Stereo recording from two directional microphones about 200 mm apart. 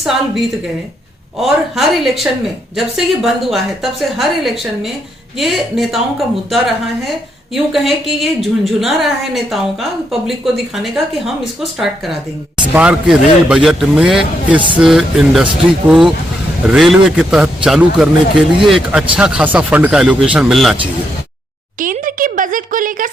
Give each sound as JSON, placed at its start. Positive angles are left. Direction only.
{"t": 1.4, "sound": "a woman's voice", "side_deg": 0}
{"t": 21.8, "sound": "speech", "side_deg": -45}